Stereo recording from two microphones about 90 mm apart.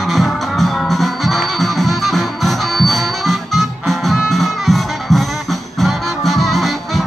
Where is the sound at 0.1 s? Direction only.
Centre (ahead or behind).